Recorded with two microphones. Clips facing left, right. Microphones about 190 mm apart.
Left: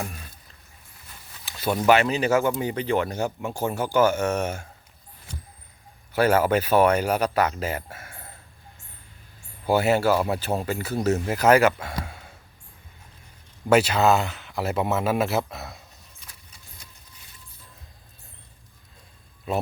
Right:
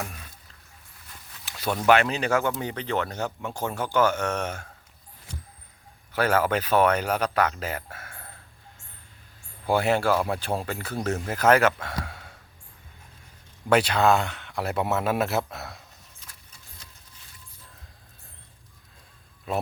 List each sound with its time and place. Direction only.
1.5 s speech: 5° left (ahead or behind)
6.1 s speech: 10° left (ahead or behind)
9.6 s speech: 5° left (ahead or behind)
13.7 s speech: 5° left (ahead or behind)